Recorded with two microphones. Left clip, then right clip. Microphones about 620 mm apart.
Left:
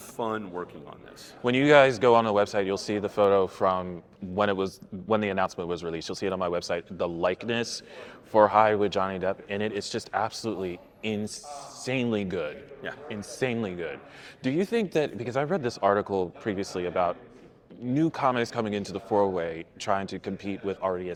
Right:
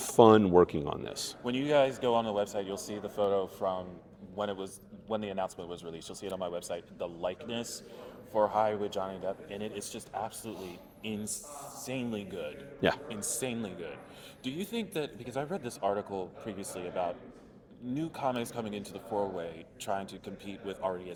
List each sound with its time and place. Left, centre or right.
0.2 s speech: right
1.5 s speech: left
11.9 s speech: left; by 21.1 s centre